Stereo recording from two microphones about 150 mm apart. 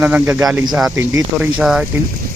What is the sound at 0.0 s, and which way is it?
Speech, 10° right (ahead or behind).